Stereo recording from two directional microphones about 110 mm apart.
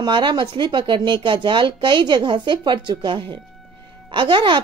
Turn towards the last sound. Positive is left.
turn(degrees=-45)  # may be behind; listen again after turning